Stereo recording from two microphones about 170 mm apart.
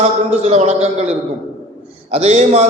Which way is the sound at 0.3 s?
35° right (ahead or behind).